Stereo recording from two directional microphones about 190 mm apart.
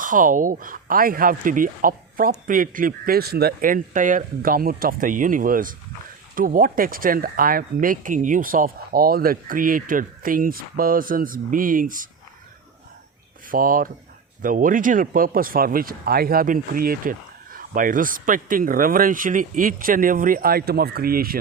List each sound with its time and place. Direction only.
0.0 s speech: 45° right (ahead or behind)
13.5 s speech: 45° right (ahead or behind)